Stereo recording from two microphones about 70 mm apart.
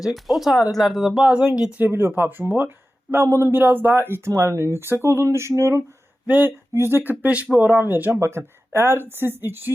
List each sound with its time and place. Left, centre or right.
0.0 s speech: centre
1.8 s speech: right
3.5 s speech: right
6.2 s speech: right
6.7 s speech: right
7.2 s speech: right
8.1 s speech: right